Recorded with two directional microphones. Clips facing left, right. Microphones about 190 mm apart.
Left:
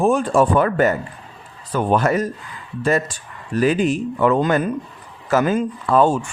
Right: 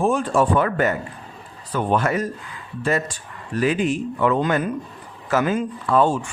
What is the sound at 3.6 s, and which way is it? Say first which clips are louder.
Speech: left 3 dB; 40° left (ahead or behind).